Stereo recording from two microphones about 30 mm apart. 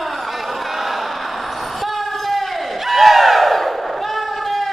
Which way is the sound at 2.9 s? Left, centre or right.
Centre.